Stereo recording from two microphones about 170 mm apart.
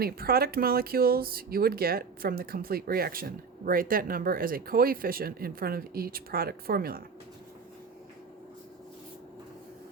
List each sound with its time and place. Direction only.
0.0 s speech: 65° right (ahead or behind)